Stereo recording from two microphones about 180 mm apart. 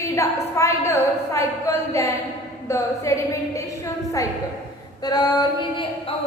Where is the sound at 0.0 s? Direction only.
15° left (ahead or behind).